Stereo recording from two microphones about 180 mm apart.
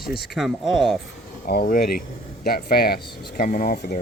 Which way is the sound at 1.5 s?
55° left (ahead or behind).